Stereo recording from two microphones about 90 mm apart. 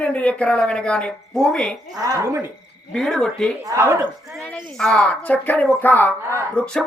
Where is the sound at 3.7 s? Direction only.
30° right (ahead or behind).